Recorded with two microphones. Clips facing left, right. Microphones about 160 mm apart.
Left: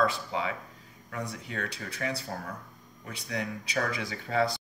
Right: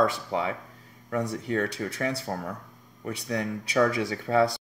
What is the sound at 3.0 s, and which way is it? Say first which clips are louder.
Speech: right 5 dB; 50° right (ahead or behind).